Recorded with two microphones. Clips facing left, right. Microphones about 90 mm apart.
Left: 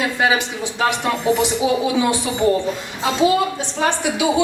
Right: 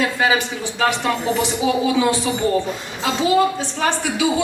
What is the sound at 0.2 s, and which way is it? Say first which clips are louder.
A woman's voice: even; 20° left (ahead or behind).